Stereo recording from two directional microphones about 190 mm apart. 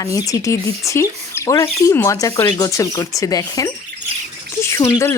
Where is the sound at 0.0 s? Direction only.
20° left (ahead or behind).